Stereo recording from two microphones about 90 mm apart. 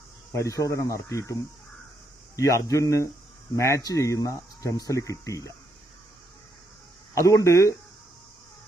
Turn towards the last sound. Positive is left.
turn(degrees=35)  # may be behind; listen again after turning